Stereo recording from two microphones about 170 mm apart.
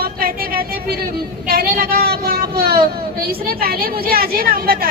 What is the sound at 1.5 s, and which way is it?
A woman's voice, 60° right (ahead or behind).